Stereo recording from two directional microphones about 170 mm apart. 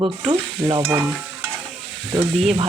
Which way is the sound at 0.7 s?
15° right (ahead or behind).